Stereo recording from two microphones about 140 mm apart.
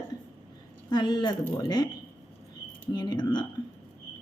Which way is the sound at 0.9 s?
30° left (ahead or behind).